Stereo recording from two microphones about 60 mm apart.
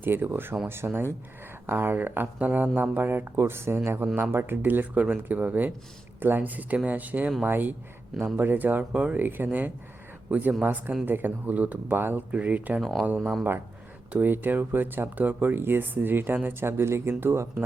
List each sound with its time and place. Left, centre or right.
0.0 s speech: right
8.8 s speech: centre
9.1 s speech: right
12.3 s speech: right
12.8 s speech: centre
14.1 s speech: right
17.3 s speech: right